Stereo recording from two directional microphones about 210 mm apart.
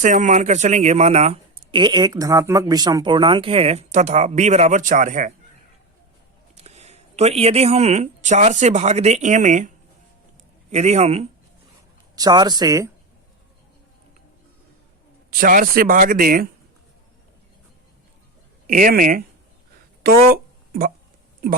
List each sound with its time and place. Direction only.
0.0 s speech: 35° right (ahead or behind)
6.6 s speech: 30° right (ahead or behind)
12.1 s speech: 20° right (ahead or behind)
15.3 s speech: 40° right (ahead or behind)
18.7 s speech: 40° right (ahead or behind)
20.0 s a sound: 45° right (ahead or behind)